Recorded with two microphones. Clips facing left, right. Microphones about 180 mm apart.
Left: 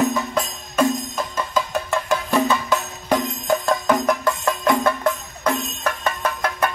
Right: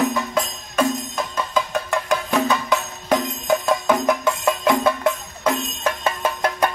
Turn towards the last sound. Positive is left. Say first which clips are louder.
# right 2 dB
turn(degrees=-25)  # may be behind; listen again after turning